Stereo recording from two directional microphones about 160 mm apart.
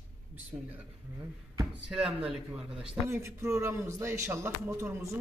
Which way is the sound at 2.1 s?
5° right (ahead or behind).